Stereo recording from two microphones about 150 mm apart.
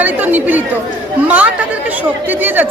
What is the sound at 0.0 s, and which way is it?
Speech, 10° right (ahead or behind).